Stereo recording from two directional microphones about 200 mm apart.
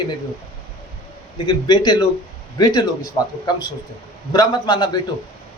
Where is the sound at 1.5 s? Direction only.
20° left (ahead or behind).